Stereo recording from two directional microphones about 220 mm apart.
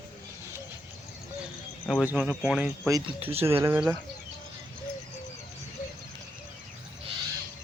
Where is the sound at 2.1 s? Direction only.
10° right (ahead or behind).